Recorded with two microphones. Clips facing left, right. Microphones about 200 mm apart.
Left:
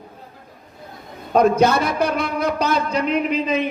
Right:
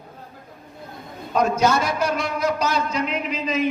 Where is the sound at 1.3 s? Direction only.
60° left (ahead or behind).